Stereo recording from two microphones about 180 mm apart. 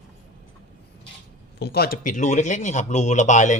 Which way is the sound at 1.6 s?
60° left (ahead or behind).